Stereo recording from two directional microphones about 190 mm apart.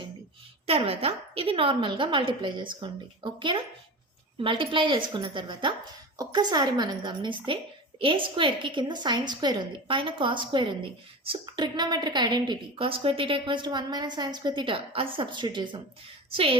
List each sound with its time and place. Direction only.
0.7 s a woman's voice: 30° right (ahead or behind)